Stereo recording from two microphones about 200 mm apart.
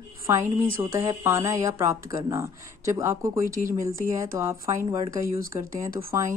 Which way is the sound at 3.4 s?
40° right (ahead or behind).